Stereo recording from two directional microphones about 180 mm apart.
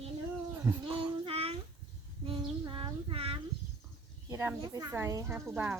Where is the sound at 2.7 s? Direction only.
30° right (ahead or behind).